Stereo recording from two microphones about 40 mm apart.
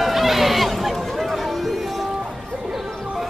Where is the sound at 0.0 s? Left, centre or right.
Centre.